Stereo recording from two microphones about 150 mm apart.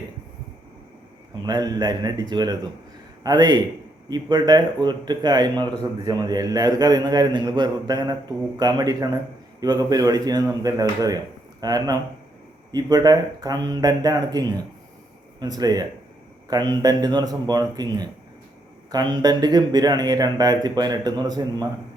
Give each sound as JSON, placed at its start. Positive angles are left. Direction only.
{"t": 1.5, "sound": "speech", "side_deg": -25}